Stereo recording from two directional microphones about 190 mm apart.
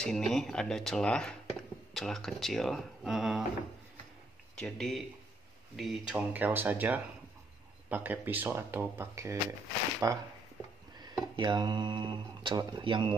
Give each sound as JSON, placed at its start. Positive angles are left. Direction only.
{"t": 0.0, "sound": "speech", "side_deg": 0}
{"t": 4.6, "sound": "speech", "side_deg": 5}